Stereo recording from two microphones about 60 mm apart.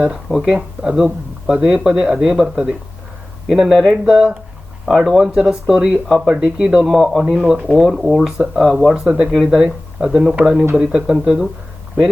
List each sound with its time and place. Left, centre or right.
0.3 s speech: centre
4.9 s speech: centre
6.8 s speech: centre
7.3 s speech: centre
7.9 s speech: centre